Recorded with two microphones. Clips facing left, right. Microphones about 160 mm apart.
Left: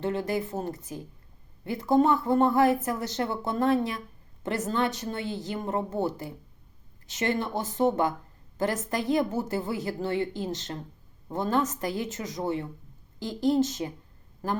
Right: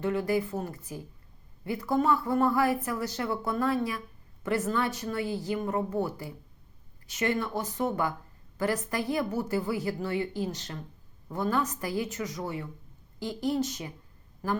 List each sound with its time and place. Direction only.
0.0 s a woman's voice: 25° left (ahead or behind)